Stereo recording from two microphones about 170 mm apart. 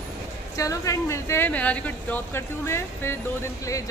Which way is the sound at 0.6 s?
20° left (ahead or behind).